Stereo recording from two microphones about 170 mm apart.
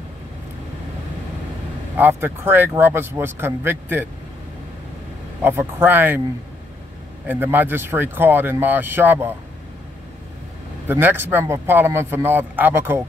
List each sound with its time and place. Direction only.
2.0 s speech: 10° right (ahead or behind)
5.4 s speech: 15° right (ahead or behind)
7.2 s speech: 10° right (ahead or behind)
10.9 s speech: 10° right (ahead or behind)